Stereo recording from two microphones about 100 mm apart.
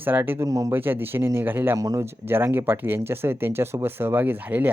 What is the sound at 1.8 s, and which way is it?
Speech, 30° right (ahead or behind).